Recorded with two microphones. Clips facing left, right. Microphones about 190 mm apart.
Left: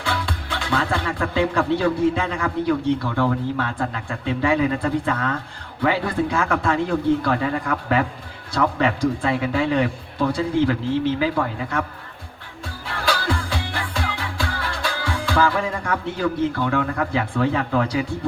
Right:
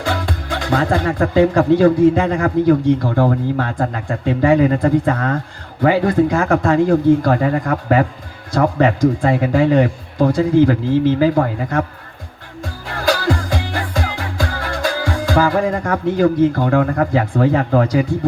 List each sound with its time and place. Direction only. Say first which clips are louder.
0.0 s music: right 5 dB; 45° right (ahead or behind)
1.8 s a man's voice: right 8 dB; 45° right (ahead or behind)
12.9 s music: right 6 dB; 45° right (ahead or behind)